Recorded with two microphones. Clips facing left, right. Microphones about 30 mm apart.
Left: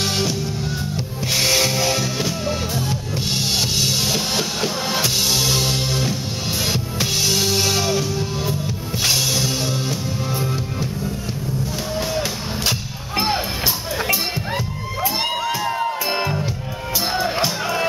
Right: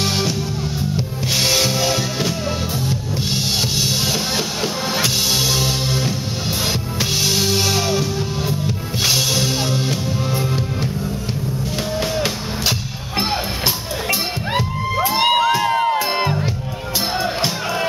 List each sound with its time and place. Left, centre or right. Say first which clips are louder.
0.0 s music: right 1 dB; centre
1.3 s music: right 1 dB; centre
3.7 s music: even; centre; by 9.9 s right
15.1 s crowd: right 9 dB; right
15.6 s music: right 5 dB; right
16.0 s music: right 3 dB; centre